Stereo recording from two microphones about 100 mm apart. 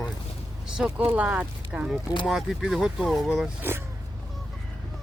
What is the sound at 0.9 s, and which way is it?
Speech, 15° right (ahead or behind).